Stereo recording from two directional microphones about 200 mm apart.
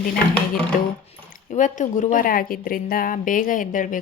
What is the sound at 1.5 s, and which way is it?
A woman's voice, 40° left (ahead or behind).